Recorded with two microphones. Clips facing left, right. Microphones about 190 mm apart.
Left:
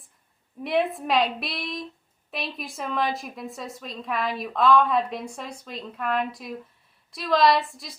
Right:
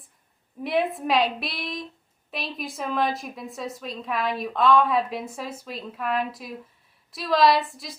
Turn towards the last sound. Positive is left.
turn(degrees=0)  # may be behind; listen again after turning